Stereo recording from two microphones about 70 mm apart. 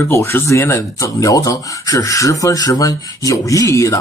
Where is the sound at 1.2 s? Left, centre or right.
Left.